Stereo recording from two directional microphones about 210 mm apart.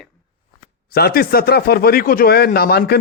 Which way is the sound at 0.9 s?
45° left (ahead or behind).